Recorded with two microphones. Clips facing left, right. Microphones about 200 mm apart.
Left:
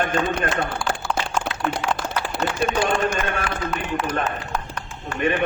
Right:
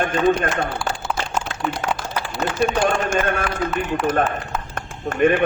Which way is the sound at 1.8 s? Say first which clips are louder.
Right 2 dB; 45° right (ahead or behind).